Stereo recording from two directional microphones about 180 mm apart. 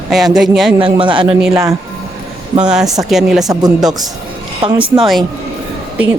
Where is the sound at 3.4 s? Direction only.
20° right (ahead or behind).